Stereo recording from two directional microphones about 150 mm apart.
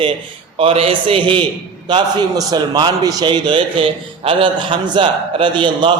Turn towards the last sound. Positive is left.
turn(degrees=-30)  # may be behind; listen again after turning